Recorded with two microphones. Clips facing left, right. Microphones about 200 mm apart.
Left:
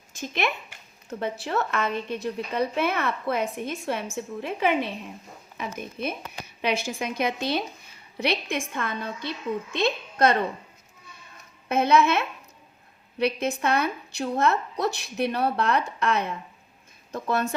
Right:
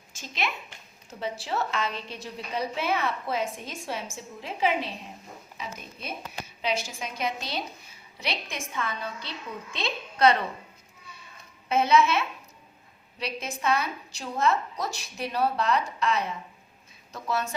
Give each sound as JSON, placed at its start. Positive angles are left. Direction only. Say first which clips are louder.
{"t": 0.2, "sound": "a woman's voice", "louder": "left 5 dB", "side_deg": 55}
{"t": 11.7, "sound": "a woman's voice", "louder": "left 2 dB", "side_deg": 55}